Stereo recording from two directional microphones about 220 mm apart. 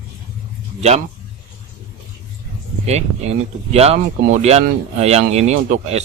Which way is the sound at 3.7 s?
30° right (ahead or behind).